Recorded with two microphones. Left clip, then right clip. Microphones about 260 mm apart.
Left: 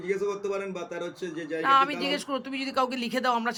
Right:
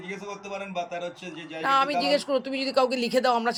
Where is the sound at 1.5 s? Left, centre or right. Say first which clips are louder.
Even; centre.